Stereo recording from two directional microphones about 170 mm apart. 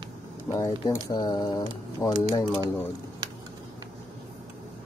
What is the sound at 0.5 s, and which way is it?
Speech, 20° left (ahead or behind).